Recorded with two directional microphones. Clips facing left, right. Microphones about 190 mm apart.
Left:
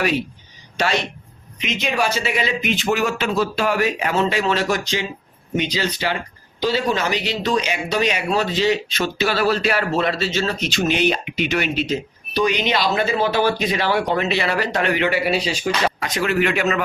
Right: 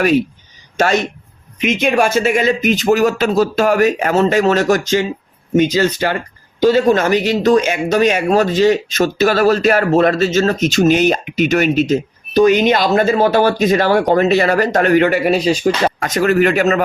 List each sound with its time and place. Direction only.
0.8 s speech: 45° right (ahead or behind)